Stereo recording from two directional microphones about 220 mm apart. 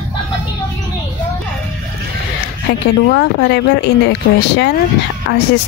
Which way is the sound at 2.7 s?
50° left (ahead or behind).